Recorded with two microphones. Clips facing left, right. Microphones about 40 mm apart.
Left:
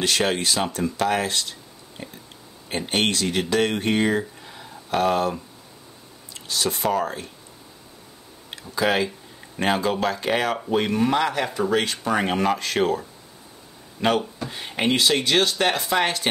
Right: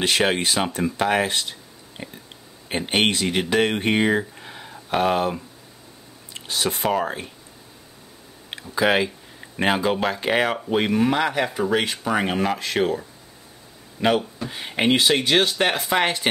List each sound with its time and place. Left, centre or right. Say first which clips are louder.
0.0 s speech: right 2 dB; right
8.7 s speech: right 2 dB; centre
14.0 s speech: right 1 dB; centre